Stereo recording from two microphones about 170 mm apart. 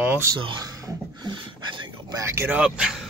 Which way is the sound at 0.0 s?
15° right (ahead or behind).